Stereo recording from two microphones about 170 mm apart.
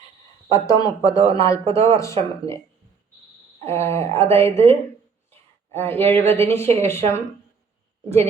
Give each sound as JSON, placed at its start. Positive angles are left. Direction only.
{"t": 0.5, "sound": "speech", "side_deg": 20}
{"t": 3.7, "sound": "speech", "side_deg": 15}
{"t": 5.7, "sound": "speech", "side_deg": 15}